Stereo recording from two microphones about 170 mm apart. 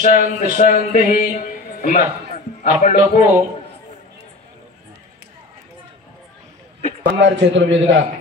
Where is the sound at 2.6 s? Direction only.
45° left (ahead or behind).